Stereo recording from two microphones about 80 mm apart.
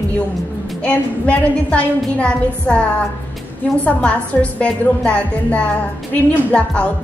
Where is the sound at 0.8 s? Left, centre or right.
Centre.